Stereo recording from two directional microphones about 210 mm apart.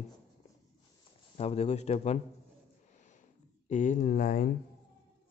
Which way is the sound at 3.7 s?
35° left (ahead or behind).